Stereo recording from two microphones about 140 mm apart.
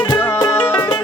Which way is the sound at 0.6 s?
15° left (ahead or behind).